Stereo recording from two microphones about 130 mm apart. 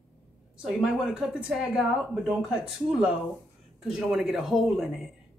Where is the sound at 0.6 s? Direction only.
5° right (ahead or behind).